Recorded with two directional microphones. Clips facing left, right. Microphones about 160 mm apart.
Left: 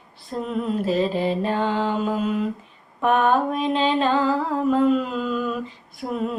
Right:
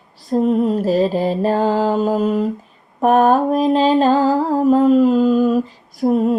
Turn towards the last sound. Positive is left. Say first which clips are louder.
# right 11 dB
turn(degrees=-40)  # may be behind; listen again after turning